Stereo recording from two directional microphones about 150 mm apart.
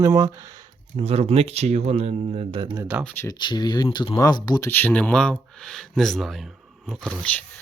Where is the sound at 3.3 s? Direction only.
30° left (ahead or behind).